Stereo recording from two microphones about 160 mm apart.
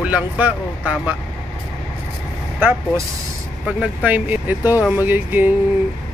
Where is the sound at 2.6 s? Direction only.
10° right (ahead or behind).